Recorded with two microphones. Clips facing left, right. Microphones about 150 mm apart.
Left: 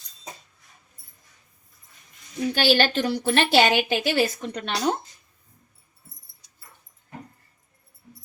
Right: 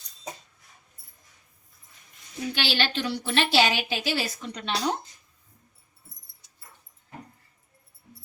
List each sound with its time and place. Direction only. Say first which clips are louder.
2.6 s a woman's voice: left 8 dB; 45° left (ahead or behind)